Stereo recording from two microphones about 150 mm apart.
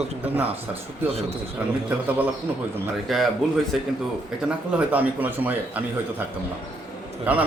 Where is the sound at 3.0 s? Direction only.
Centre (ahead or behind).